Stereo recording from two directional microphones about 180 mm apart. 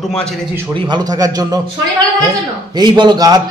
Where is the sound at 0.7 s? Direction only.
25° right (ahead or behind).